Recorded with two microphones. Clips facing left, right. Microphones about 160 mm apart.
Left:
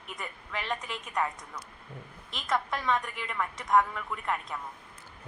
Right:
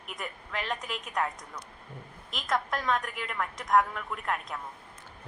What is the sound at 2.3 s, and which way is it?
A woman's voice, centre (ahead or behind).